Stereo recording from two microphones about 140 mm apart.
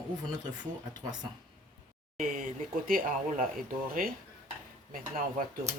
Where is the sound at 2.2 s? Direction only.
65° right (ahead or behind); by 3.4 s 85° right.